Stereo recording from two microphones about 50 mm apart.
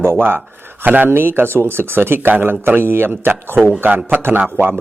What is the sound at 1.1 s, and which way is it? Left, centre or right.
A man's voice, right.